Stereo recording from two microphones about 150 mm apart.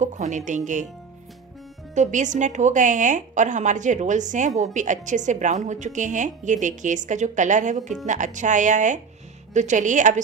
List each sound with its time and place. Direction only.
0.0 s a woman's voice: 55° right (ahead or behind)
2.0 s a woman's voice: 55° right (ahead or behind)